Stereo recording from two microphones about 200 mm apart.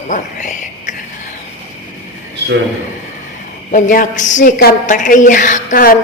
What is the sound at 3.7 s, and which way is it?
A woman's voice, 40° left (ahead or behind).